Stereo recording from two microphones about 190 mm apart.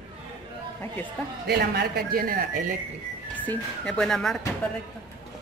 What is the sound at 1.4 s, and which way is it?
Speech, 55° right (ahead or behind).